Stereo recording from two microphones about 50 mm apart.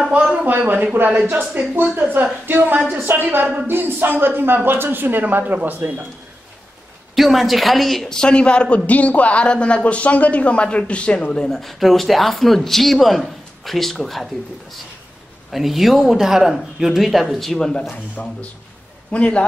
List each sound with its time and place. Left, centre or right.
0.1 s a sound: right
0.5 s speech: right
3.6 s a sound: right
4.6 s speech: right
7.2 s speech: centre
8.1 s a man's voice: centre
17.8 s a man's voice: left